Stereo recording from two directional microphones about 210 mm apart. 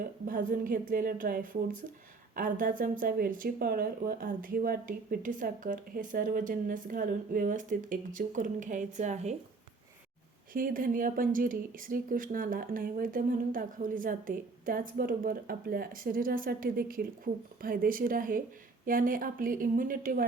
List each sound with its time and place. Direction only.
0.0 s speech: 40° right (ahead or behind)
10.5 s speech: 40° right (ahead or behind)